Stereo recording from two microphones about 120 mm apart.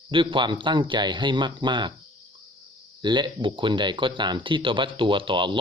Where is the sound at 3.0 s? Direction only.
40° right (ahead or behind).